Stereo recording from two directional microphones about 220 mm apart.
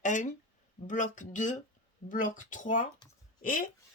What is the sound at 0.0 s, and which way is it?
Speech, 35° left (ahead or behind).